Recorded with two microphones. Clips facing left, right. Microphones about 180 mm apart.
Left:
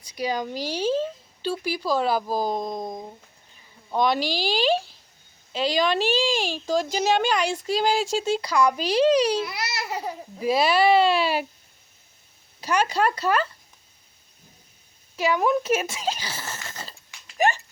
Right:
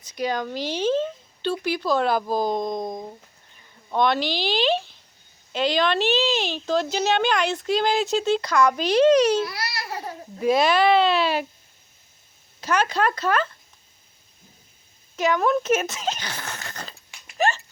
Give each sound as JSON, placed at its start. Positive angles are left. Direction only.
{"t": 0.0, "sound": "speech", "side_deg": 10}
{"t": 9.4, "sound": "baby cry", "side_deg": 20}
{"t": 10.4, "sound": "speech", "side_deg": 5}
{"t": 12.5, "sound": "speech", "side_deg": 10}
{"t": 15.1, "sound": "speech", "side_deg": 5}
{"t": 16.6, "sound": "a sound", "side_deg": 5}
{"t": 17.3, "sound": "a sound", "side_deg": 15}